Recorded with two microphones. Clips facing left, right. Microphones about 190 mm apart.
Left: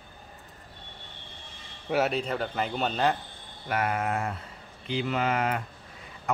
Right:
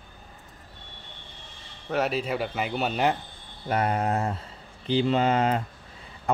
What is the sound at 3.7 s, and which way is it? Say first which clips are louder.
Speech: right 3 dB; 30° right (ahead or behind).